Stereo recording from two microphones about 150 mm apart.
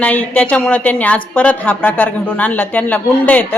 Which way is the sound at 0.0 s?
10° left (ahead or behind).